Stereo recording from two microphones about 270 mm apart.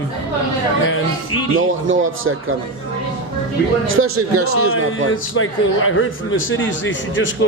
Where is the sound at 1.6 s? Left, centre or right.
Right.